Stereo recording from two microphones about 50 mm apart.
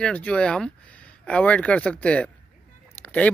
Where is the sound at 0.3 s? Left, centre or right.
Centre.